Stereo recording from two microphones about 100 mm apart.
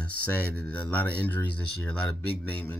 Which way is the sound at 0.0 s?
15° left (ahead or behind).